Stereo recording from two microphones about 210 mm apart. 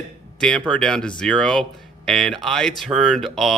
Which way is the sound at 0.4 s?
5° left (ahead or behind).